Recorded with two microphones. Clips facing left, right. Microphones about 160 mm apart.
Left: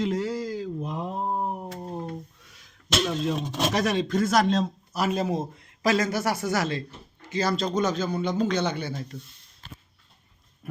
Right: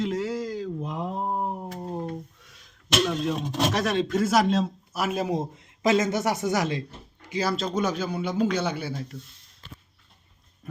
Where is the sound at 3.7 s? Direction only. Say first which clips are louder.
Left 3 dB; centre (ahead or behind).